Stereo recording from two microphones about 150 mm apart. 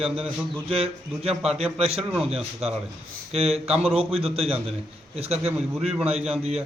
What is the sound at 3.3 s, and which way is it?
Mantra, 45° right (ahead or behind).